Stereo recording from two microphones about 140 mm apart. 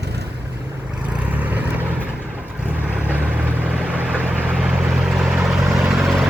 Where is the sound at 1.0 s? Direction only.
10° right (ahead or behind).